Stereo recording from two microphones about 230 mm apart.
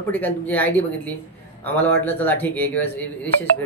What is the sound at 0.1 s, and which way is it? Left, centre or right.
Speech, centre.